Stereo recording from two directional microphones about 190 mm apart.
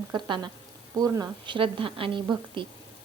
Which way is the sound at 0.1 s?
20° right (ahead or behind).